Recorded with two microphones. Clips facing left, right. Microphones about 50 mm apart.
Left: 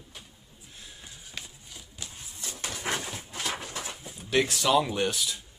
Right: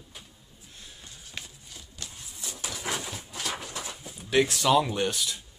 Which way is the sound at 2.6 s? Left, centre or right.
Left.